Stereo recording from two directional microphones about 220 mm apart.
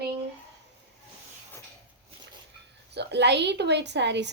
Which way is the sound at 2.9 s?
50° right (ahead or behind).